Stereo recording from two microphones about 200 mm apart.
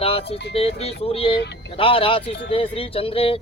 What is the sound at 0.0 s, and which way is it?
Speech, 30° left (ahead or behind).